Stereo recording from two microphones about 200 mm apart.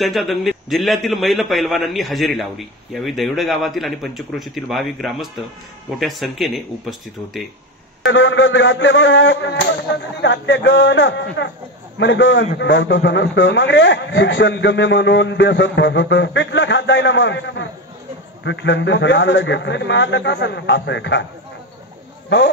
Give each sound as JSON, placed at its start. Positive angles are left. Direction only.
{"t": 0.0, "sound": "a man's voice", "side_deg": 0}
{"t": 8.1, "sound": "a sound", "side_deg": 75}
{"t": 12.5, "sound": "a man's voice", "side_deg": 65}
{"t": 22.3, "sound": "a man's voice", "side_deg": 65}